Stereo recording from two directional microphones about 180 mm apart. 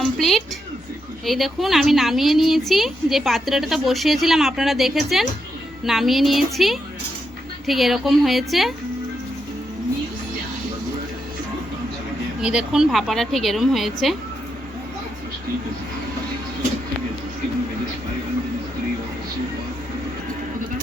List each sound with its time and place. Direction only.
0.0 s a woman's voice: centre (ahead or behind)
12.4 s a woman's voice: 5° right (ahead or behind)